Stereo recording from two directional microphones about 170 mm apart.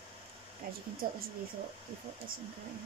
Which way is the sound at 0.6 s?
60° right (ahead or behind).